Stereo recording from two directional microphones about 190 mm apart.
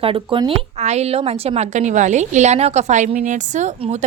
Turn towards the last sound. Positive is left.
turn(degrees=-35)  # may be behind; listen again after turning